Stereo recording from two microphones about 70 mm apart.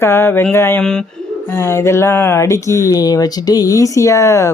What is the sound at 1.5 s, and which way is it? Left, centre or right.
Speech, left.